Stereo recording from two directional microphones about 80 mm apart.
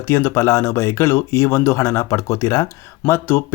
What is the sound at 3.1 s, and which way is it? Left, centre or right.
Speech, left.